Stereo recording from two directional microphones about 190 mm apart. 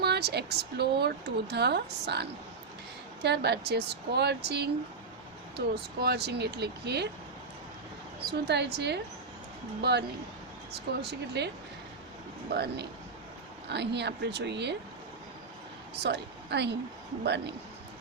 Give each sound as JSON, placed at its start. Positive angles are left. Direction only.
{"t": 0.0, "sound": "speech", "side_deg": -60}
{"t": 3.2, "sound": "speech", "side_deg": -60}
{"t": 8.3, "sound": "speech", "side_deg": -60}
{"t": 11.1, "sound": "speech", "side_deg": -60}
{"t": 16.0, "sound": "speech", "side_deg": -60}